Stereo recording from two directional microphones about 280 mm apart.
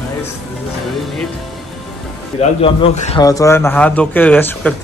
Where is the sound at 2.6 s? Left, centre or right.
Left.